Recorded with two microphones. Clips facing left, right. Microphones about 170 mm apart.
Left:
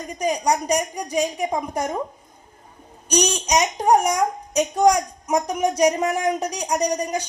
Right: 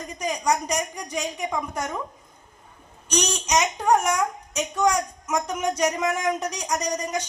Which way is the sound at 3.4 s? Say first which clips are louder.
Left 3 dB; 35° left (ahead or behind).